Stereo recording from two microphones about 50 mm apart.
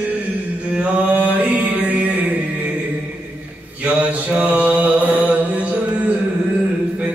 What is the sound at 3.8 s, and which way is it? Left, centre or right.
Mantra, right.